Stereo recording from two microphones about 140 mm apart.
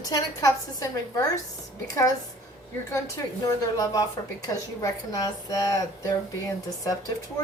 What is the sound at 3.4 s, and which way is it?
A woman's voice, 25° left (ahead or behind).